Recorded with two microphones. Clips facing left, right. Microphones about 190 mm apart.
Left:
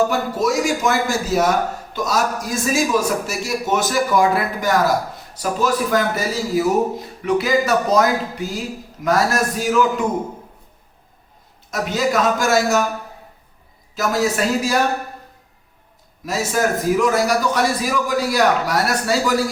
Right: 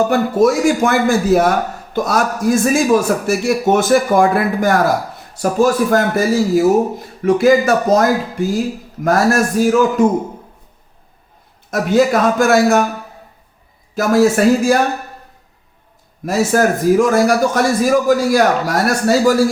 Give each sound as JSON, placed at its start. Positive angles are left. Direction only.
{"t": 0.1, "sound": "a man's voice", "side_deg": -55}
{"t": 9.0, "sound": "a man's voice", "side_deg": -50}
{"t": 11.7, "sound": "a man's voice", "side_deg": -50}
{"t": 13.9, "sound": "a man's voice", "side_deg": -55}
{"t": 16.2, "sound": "a man's voice", "side_deg": -55}